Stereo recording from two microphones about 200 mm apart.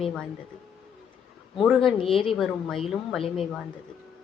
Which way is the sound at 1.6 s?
Centre (ahead or behind).